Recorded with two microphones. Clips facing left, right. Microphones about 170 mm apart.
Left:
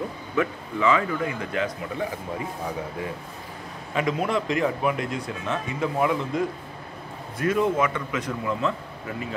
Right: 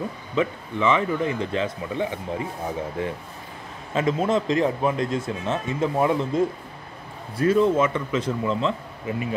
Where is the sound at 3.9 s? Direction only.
25° right (ahead or behind).